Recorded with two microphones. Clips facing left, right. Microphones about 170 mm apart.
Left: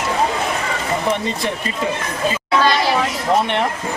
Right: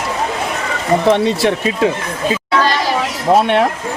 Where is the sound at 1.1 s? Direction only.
75° right (ahead or behind).